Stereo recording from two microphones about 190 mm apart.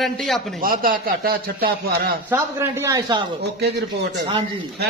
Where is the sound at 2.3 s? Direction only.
15° right (ahead or behind).